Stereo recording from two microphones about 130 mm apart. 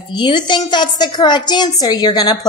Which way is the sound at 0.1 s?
35° left (ahead or behind).